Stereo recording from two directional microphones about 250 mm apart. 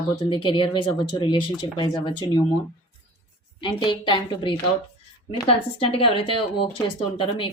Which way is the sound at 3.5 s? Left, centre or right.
Centre.